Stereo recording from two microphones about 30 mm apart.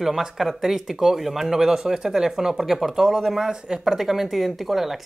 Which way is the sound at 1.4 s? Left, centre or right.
Centre.